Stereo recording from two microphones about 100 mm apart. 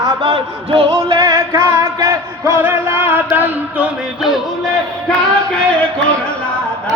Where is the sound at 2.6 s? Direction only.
20° right (ahead or behind).